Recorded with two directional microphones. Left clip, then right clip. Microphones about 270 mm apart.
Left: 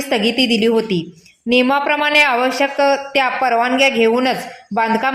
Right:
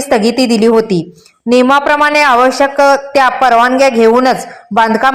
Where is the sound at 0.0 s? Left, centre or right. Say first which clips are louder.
Right 7 dB; centre.